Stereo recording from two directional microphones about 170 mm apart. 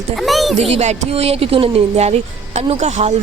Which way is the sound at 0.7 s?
40° right (ahead or behind).